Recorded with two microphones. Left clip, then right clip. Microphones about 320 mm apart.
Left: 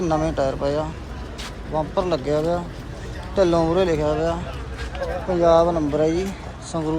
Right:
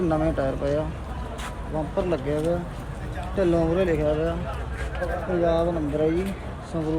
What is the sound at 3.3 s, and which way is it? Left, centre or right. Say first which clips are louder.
Speech: left 4 dB; centre.